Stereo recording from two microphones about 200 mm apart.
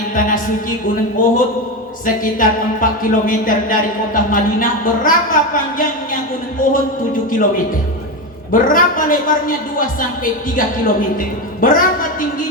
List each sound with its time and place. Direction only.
0.1 s a sound: 40° left (ahead or behind)
1.2 s speech: 40° left (ahead or behind)
8.5 s speech: 45° left (ahead or behind)